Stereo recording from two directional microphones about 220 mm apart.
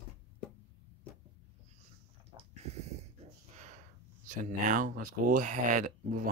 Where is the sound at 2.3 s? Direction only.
30° right (ahead or behind).